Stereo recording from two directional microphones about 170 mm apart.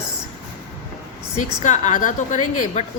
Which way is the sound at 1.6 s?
45° left (ahead or behind).